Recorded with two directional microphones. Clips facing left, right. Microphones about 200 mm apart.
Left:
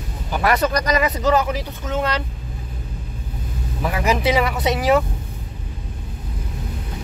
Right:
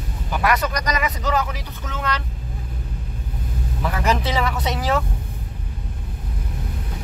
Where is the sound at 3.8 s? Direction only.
10° left (ahead or behind).